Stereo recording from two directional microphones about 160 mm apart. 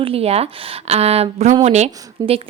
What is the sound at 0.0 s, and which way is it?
Speech, 35° right (ahead or behind).